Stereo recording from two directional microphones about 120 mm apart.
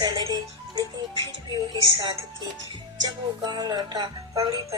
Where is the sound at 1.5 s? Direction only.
35° right (ahead or behind).